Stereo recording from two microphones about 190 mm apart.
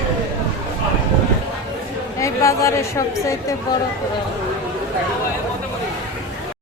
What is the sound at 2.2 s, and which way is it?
A woman's voice, 15° left (ahead or behind).